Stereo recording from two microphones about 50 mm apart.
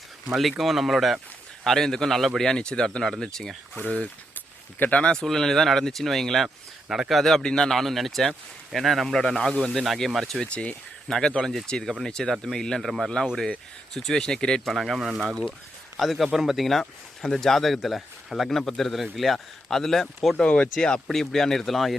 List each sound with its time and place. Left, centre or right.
0.5 s speech: centre
1.6 s a man's voice: centre
4.9 s speech: left
5.2 s a man's voice: centre
6.8 s speech: centre
7.1 s speech: centre
10.4 s a man's voice: left
13.9 s a man's voice: centre
14.6 s a man's voice: centre
20.3 s speech: left
21.1 s a man's voice: centre